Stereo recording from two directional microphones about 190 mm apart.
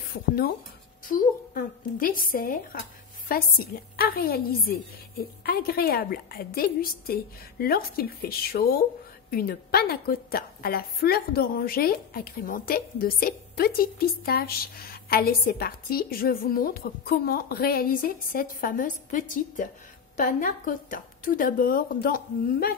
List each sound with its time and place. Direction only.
1.0 s a woman's voice: 45° left (ahead or behind)